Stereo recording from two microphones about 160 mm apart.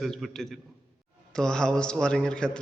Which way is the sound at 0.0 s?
Centre (ahead or behind).